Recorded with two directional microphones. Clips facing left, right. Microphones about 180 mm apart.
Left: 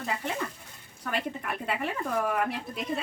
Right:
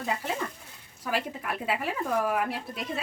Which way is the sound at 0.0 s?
Centre (ahead or behind).